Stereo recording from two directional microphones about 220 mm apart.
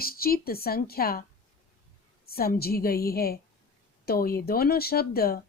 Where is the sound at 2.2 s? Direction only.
45° left (ahead or behind).